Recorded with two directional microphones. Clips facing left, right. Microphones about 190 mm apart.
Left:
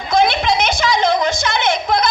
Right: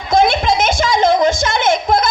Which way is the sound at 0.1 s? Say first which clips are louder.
Right 2 dB; 50° right (ahead or behind).